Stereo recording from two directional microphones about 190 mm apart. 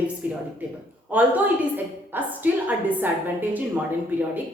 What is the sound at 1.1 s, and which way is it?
A woman's voice, 5° right (ahead or behind).